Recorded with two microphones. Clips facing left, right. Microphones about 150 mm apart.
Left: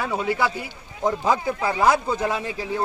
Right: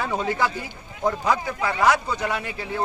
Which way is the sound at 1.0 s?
25° left (ahead or behind).